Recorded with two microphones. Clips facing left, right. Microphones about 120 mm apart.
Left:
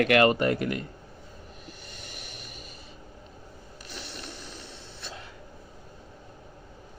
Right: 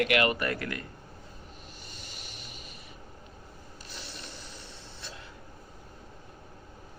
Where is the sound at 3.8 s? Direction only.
65° left (ahead or behind).